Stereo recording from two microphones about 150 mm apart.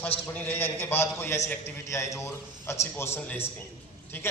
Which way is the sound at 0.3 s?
15° left (ahead or behind).